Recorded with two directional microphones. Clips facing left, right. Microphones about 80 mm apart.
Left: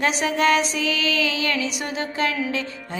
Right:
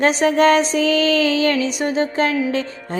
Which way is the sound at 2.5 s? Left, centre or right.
Right.